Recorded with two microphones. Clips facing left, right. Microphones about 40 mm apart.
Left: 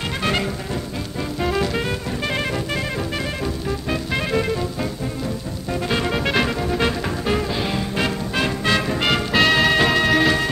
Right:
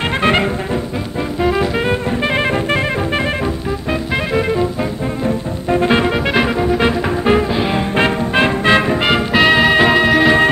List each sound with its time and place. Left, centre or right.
0.2 s music: right
1.4 s music: centre
4.3 s music: right
5.2 s music: right
6.1 s music: centre
7.9 s music: right; by 10.3 s centre